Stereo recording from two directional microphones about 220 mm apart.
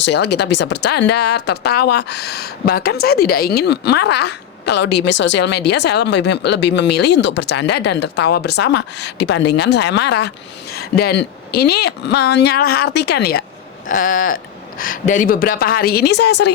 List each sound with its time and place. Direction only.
0.0 s speech: 50° left (ahead or behind)
13.8 s speech: 35° left (ahead or behind)